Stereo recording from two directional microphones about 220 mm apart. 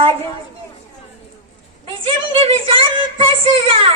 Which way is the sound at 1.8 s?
25° right (ahead or behind).